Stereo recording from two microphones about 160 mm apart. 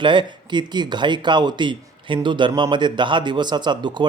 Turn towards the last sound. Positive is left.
turn(degrees=-30)  # may be behind; listen again after turning